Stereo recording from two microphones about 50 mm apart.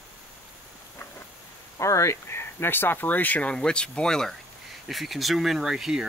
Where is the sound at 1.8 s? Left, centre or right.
Left.